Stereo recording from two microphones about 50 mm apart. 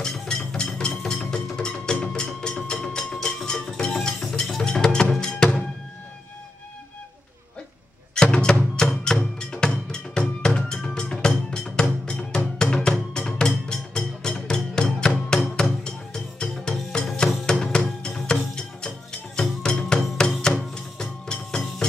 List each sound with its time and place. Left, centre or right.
0.0 s music: centre
8.1 s music: centre